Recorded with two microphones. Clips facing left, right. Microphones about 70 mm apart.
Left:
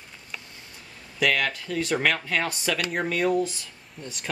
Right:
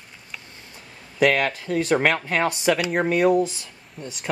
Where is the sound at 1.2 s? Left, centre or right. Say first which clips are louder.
Right 5 dB; right.